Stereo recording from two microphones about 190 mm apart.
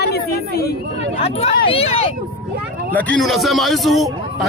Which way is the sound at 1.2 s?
30° left (ahead or behind).